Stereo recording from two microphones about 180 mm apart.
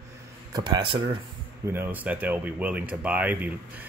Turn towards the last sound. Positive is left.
turn(degrees=-10)  # may be behind; listen again after turning